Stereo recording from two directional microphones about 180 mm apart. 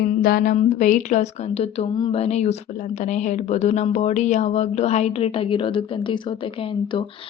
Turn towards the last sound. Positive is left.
turn(degrees=30)  # may be behind; listen again after turning